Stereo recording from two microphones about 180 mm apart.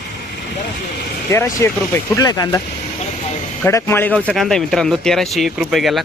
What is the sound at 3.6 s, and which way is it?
Speech, 10° left (ahead or behind).